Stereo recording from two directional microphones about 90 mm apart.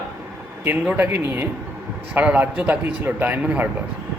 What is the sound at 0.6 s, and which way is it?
A man's voice, 20° right (ahead or behind).